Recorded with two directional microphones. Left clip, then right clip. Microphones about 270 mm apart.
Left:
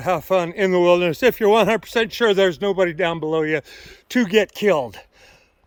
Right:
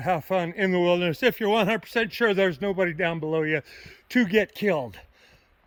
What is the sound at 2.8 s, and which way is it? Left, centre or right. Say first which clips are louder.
Speech: left 5 dB; left.